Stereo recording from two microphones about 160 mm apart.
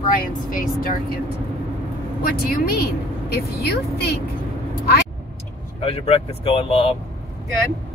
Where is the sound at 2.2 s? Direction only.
70° left (ahead or behind).